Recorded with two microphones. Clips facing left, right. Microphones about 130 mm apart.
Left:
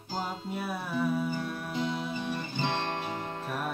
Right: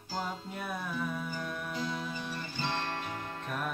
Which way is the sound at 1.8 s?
20° left (ahead or behind).